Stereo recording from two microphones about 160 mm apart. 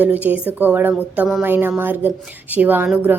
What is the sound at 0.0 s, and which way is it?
A woman's voice, 10° right (ahead or behind).